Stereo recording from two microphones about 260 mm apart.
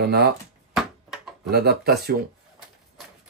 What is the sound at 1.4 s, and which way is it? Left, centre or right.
Speech, right.